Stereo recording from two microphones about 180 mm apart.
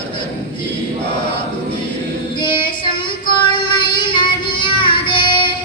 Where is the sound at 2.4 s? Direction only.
25° left (ahead or behind).